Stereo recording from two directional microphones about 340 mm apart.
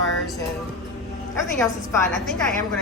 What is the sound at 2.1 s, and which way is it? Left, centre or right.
Speech, centre.